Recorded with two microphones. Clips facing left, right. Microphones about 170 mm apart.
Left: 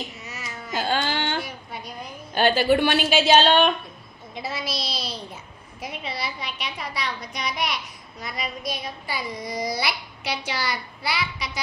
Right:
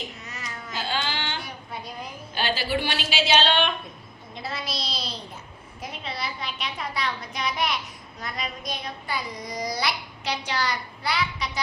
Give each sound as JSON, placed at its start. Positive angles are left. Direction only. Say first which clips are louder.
{"t": 0.3, "sound": "baby cry", "louder": "left 1 dB", "side_deg": 5}
{"t": 0.7, "sound": "baby cry", "louder": "left 5 dB", "side_deg": 45}
{"t": 2.3, "sound": "a woman's voice", "louder": "left 8 dB", "side_deg": 50}
{"t": 4.4, "sound": "a woman's voice", "louder": "left 2 dB", "side_deg": 5}